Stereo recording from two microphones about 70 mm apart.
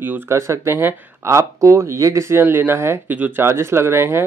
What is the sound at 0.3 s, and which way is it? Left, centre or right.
Speech, right.